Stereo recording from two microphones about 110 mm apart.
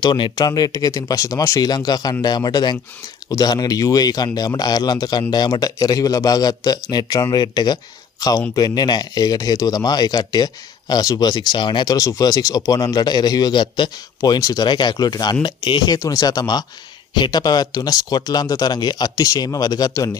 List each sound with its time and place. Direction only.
0.0 s speech: 40° left (ahead or behind)